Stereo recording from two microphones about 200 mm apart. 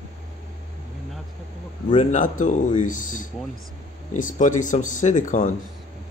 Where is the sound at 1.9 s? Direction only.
40° left (ahead or behind).